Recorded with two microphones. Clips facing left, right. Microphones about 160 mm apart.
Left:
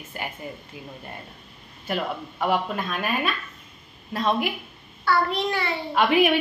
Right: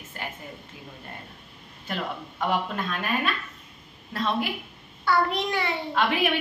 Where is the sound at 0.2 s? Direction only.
10° left (ahead or behind).